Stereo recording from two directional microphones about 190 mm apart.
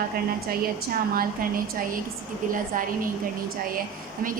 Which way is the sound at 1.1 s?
50° right (ahead or behind).